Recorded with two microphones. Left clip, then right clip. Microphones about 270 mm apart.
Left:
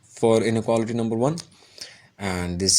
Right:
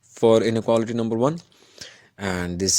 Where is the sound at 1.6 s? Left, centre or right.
Right.